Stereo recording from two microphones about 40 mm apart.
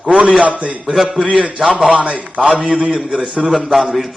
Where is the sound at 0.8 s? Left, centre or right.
Centre.